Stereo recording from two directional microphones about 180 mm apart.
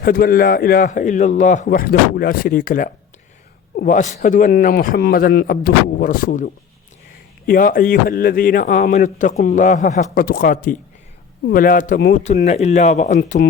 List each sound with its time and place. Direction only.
0.0 s a man's voice: 55° left (ahead or behind)
12.5 s speech: 40° left (ahead or behind)